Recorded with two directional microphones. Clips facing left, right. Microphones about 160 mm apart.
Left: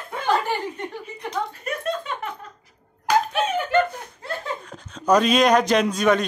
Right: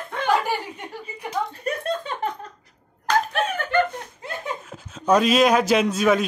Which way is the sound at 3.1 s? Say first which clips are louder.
Left 2 dB; 10° left (ahead or behind).